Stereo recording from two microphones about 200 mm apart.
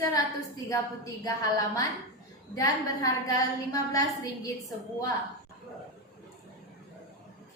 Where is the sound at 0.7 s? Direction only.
15° left (ahead or behind).